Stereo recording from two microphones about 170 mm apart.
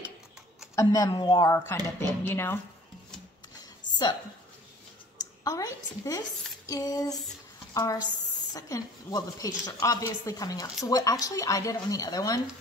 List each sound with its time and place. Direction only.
0.7 s a woman's voice: 20° left (ahead or behind)
5.1 s a sound: 20° left (ahead or behind)
6.7 s a woman's voice: 20° left (ahead or behind)